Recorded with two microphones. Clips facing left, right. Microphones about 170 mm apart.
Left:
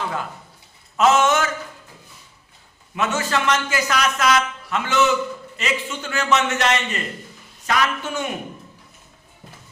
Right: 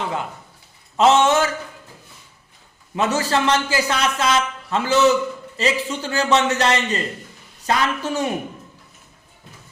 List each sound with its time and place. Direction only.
0.9 s a man's voice: 30° right (ahead or behind)
2.9 s a man's voice: 35° right (ahead or behind)